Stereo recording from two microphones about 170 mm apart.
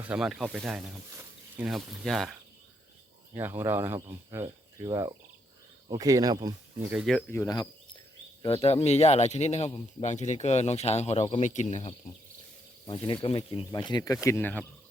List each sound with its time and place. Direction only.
0.0 s speech: 5° right (ahead or behind)
3.3 s speech: 15° right (ahead or behind)
6.9 s speech: centre (ahead or behind)
7.3 s speech: 20° left (ahead or behind)
8.4 s speech: 35° left (ahead or behind)
12.9 s speech: 30° left (ahead or behind); by 14.6 s 10° left (ahead or behind)